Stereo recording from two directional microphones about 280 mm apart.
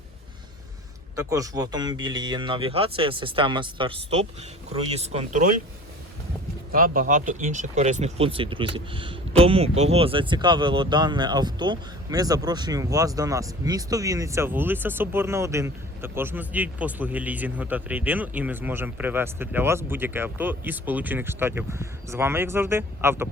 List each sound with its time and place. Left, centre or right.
1.1 s speech: centre; by 5.5 s right
6.7 s speech: right; by 23.3 s centre